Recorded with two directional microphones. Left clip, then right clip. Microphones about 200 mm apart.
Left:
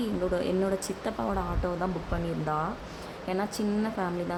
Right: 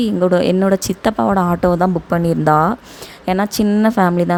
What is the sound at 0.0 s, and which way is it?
A woman's voice, 45° right (ahead or behind).